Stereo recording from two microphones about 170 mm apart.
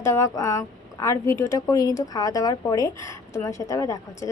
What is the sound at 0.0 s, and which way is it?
A woman's voice, 15° left (ahead or behind).